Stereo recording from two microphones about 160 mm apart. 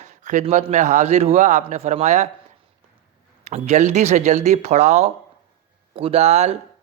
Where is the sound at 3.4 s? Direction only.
45° right (ahead or behind).